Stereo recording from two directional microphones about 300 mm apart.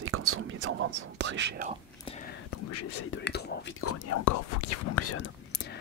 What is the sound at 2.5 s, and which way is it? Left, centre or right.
Whispering, left.